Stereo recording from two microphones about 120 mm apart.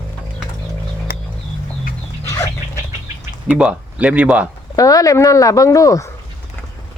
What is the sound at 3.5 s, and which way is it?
Speech, 10° right (ahead or behind).